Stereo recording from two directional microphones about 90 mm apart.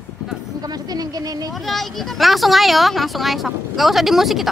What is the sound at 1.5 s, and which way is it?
Speech, centre (ahead or behind).